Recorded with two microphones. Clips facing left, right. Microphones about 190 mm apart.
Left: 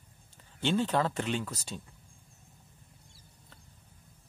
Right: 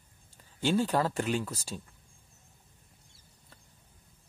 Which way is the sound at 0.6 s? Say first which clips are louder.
Right 1 dB; 10° right (ahead or behind).